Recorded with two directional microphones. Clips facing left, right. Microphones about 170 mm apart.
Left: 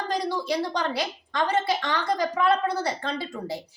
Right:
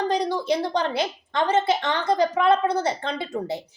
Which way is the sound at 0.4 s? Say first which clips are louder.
Right 3 dB; 20° right (ahead or behind).